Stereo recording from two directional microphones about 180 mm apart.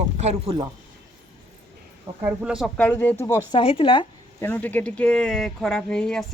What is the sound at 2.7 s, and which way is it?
Speech, 10° left (ahead or behind).